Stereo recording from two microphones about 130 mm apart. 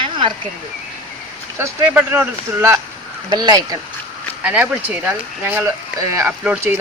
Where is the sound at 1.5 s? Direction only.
15° right (ahead or behind).